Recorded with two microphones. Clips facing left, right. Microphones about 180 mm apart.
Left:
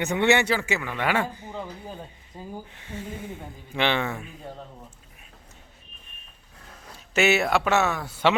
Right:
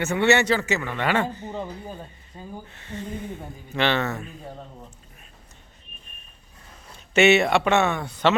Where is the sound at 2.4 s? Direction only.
10° left (ahead or behind).